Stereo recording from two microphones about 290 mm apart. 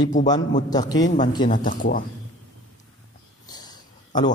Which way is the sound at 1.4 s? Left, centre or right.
Left.